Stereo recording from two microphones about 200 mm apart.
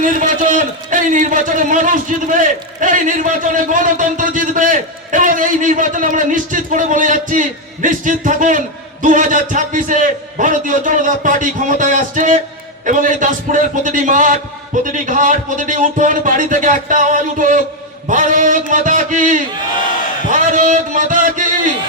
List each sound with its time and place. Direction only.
0.0 s a man's voice: 40° right (ahead or behind)